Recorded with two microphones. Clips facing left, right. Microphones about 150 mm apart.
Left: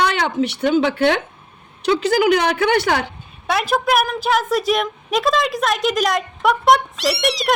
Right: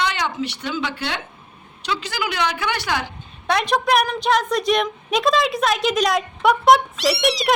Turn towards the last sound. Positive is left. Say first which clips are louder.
# even
turn(degrees=0)  # may be behind; listen again after turning